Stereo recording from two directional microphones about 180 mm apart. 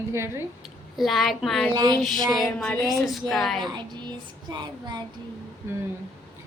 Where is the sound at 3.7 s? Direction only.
25° right (ahead or behind).